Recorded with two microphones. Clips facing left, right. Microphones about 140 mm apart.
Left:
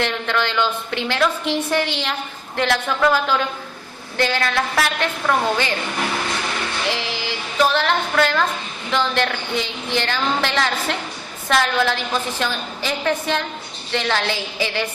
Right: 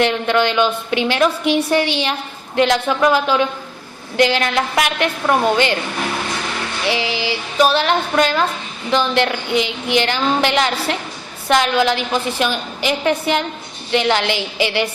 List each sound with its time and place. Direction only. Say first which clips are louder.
0.0 s a woman's voice: right 6 dB; 20° right (ahead or behind)
6.8 s a woman's voice: right 5 dB; 15° right (ahead or behind)